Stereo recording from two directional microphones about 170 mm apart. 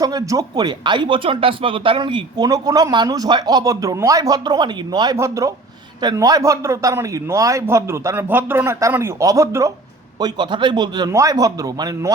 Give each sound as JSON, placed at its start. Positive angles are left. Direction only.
{"t": 0.0, "sound": "a man's voice", "side_deg": -20}